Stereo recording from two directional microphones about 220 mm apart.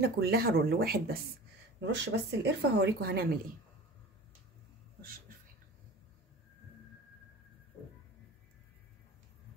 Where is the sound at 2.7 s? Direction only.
45° right (ahead or behind).